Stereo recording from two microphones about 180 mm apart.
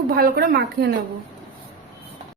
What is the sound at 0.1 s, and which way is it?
Speech, 55° right (ahead or behind).